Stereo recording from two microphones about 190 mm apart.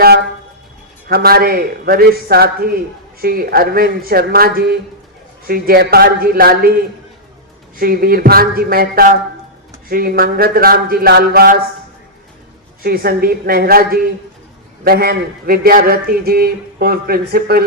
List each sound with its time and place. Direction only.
1.0 s a man's voice: 55° right (ahead or behind)
7.8 s a man's voice: 50° right (ahead or behind)
12.8 s a man's voice: 50° right (ahead or behind)